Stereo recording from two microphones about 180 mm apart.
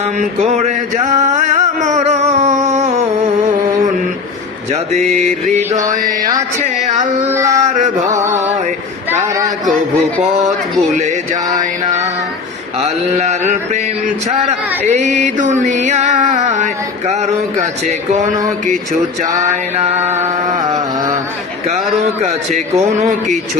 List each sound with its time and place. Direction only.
0.2 s a sound: 35° right (ahead or behind)
4.7 s music: 35° right (ahead or behind)
5.1 s mantra: 35° right (ahead or behind)
6.8 s music: 40° right (ahead or behind)
7.3 s male singing: 15° right (ahead or behind)
7.6 s music: 40° right (ahead or behind)
12.8 s mantra: 40° right (ahead or behind)
14.8 s music: 40° right (ahead or behind)
19.4 s music: 40° right (ahead or behind)
20.1 s a sound: 20° right (ahead or behind)